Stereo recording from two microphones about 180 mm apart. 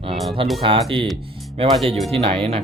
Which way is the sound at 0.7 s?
30° right (ahead or behind).